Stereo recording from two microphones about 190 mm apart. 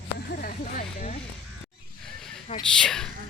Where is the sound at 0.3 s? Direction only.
45° left (ahead or behind).